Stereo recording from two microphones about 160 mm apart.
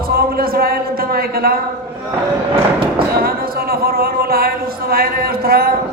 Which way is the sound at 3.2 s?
70° right (ahead or behind).